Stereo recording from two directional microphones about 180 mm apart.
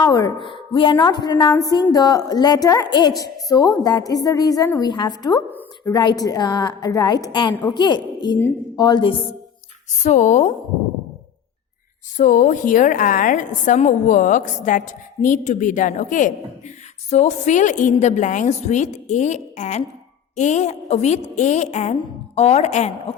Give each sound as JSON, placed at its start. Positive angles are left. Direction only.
{"t": 0.0, "sound": "a woman's voice", "side_deg": 20}
{"t": 5.5, "sound": "a sound", "side_deg": 10}
{"t": 5.9, "sound": "a woman's voice", "side_deg": 25}
{"t": 10.0, "sound": "a woman's voice", "side_deg": 40}
{"t": 12.1, "sound": "a woman's voice", "side_deg": 45}